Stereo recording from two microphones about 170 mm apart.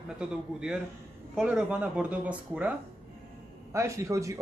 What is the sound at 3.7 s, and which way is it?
Speech, 15° right (ahead or behind).